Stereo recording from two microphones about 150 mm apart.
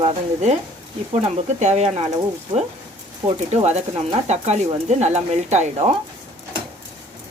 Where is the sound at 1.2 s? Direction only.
50° right (ahead or behind).